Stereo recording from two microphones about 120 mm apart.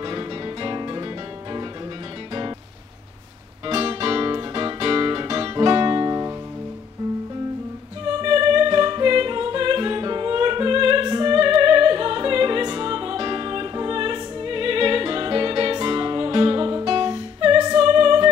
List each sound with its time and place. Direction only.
0.0 s music: 35° right (ahead or behind)
3.6 s music: 45° right (ahead or behind)
5.2 s music: 35° right (ahead or behind)
8.2 s music: 40° right (ahead or behind)